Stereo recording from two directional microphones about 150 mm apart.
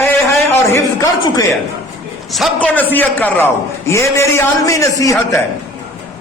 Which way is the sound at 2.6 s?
10° left (ahead or behind).